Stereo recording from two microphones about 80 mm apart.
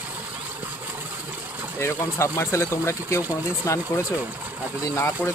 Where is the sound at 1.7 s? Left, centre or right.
Left.